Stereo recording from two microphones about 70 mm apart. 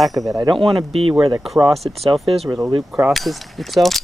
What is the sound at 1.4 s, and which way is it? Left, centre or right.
Speech, centre.